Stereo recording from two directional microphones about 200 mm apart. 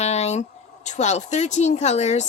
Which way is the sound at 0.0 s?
35° left (ahead or behind).